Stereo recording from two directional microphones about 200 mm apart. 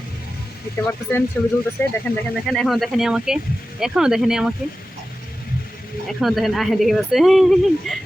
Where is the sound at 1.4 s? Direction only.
10° left (ahead or behind).